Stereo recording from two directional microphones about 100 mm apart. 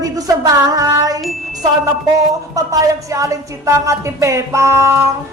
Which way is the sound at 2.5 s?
35° right (ahead or behind).